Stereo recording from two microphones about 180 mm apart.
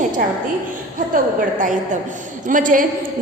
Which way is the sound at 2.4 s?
45° right (ahead or behind).